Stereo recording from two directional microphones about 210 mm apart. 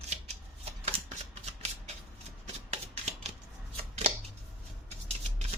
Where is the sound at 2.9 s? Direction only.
30° right (ahead or behind).